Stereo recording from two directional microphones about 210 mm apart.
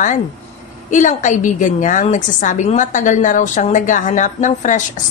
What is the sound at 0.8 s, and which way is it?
A woman's voice, 35° left (ahead or behind).